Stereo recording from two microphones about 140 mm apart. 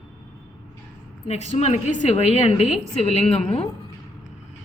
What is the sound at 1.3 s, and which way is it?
A woman's voice, 50° left (ahead or behind).